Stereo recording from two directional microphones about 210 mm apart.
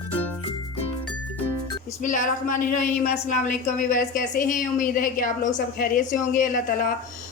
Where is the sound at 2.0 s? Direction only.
40° left (ahead or behind).